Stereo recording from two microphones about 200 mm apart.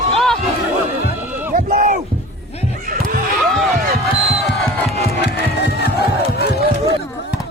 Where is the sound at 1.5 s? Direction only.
40° right (ahead or behind).